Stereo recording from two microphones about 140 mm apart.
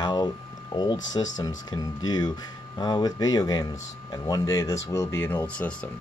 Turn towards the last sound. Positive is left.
turn(degrees=10)  # may be behind; listen again after turning